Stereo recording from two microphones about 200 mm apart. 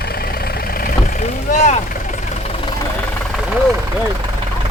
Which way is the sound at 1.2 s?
35° left (ahead or behind).